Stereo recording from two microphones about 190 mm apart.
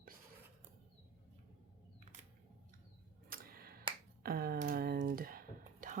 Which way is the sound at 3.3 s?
50° right (ahead or behind).